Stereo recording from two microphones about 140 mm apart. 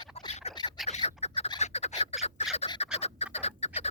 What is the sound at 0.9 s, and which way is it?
Bird, 50° left (ahead or behind).